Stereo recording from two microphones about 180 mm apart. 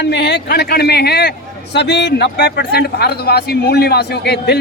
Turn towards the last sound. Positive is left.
turn(degrees=65)  # may be behind; listen again after turning